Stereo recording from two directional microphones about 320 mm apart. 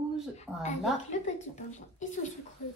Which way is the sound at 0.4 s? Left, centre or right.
Left.